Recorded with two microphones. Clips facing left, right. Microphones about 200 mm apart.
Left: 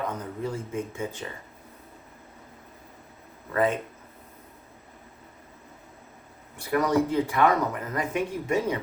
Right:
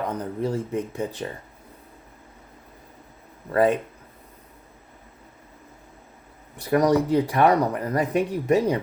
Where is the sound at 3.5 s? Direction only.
35° right (ahead or behind).